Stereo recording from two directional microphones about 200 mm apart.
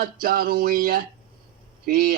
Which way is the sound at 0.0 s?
50° right (ahead or behind).